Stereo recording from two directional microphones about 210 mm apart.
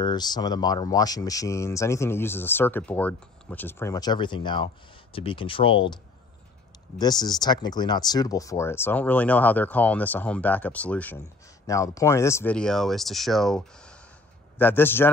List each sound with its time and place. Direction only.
0.0 s speech: 20° left (ahead or behind)
7.0 s speech: 20° left (ahead or behind)